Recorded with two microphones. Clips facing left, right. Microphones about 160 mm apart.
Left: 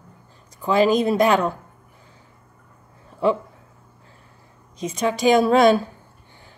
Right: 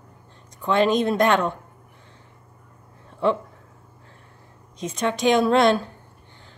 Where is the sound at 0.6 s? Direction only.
5° left (ahead or behind).